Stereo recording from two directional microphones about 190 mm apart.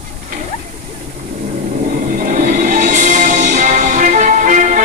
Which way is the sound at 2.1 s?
45° right (ahead or behind).